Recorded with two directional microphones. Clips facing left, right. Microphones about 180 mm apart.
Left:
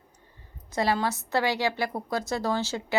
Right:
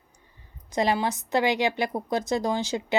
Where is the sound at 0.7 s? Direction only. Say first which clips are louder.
Right 2 dB; 20° right (ahead or behind).